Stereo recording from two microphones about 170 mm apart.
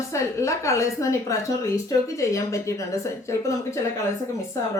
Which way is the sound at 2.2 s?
20° left (ahead or behind).